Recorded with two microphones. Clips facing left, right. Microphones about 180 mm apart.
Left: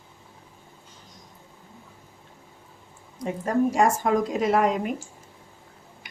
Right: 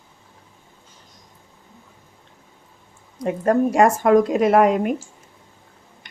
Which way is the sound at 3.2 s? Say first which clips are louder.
Right 5 dB; 65° right (ahead or behind).